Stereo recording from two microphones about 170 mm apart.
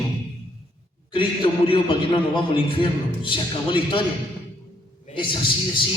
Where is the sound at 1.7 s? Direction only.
30° left (ahead or behind).